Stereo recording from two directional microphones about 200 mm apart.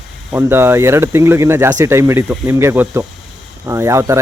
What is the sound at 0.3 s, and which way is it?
Speech, 10° right (ahead or behind).